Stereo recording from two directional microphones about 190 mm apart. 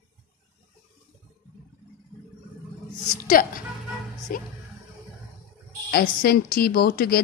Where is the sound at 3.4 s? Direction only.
45° left (ahead or behind).